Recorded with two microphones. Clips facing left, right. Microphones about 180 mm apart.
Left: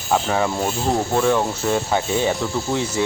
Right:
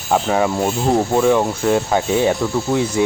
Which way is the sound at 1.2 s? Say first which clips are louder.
Right 4 dB; 10° right (ahead or behind).